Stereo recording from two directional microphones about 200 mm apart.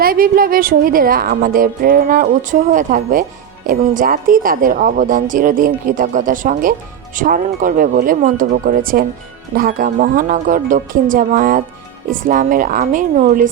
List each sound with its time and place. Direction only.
0.0 s a woman's voice: 45° right (ahead or behind)